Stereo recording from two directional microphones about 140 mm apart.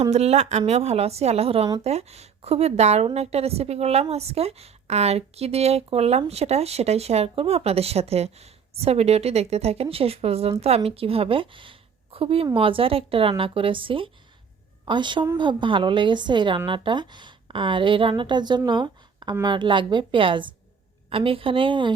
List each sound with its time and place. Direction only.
0.1 s a woman's voice: 50° right (ahead or behind)